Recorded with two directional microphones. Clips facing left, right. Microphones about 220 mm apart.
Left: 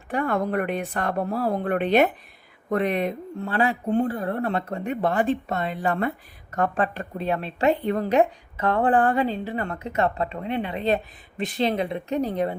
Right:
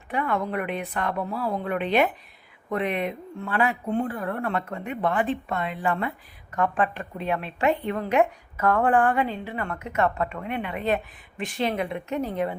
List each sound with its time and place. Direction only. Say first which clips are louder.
0.1 s speech: left 3 dB; 45° left (ahead or behind)